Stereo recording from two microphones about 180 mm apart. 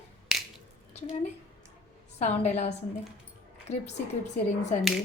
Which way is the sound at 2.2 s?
40° left (ahead or behind).